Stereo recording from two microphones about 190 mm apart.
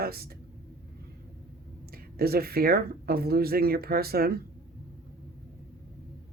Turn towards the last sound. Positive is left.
turn(degrees=-55)  # may be behind; listen again after turning